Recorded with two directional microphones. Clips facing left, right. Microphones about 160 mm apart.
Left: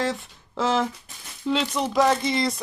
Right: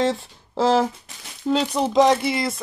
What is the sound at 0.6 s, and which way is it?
Speech, 35° right (ahead or behind).